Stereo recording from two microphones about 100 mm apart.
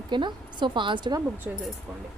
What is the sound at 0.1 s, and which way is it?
Speech, 50° right (ahead or behind).